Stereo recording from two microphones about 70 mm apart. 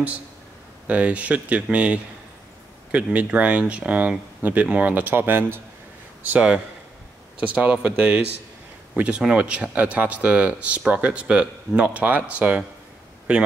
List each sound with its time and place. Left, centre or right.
0.8 s speech: right
6.3 s speech: centre